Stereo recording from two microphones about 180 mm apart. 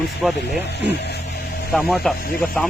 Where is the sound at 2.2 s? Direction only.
55° left (ahead or behind).